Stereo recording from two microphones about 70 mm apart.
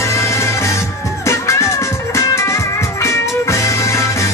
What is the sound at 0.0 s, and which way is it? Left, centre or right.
Music, left.